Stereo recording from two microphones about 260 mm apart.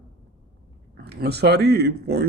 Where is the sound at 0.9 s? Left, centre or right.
Right.